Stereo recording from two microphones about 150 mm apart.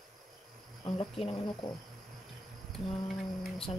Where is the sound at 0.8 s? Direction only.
40° left (ahead or behind).